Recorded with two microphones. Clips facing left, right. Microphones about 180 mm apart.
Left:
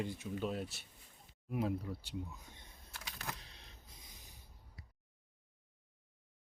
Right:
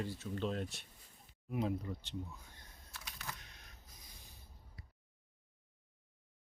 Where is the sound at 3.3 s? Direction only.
30° left (ahead or behind).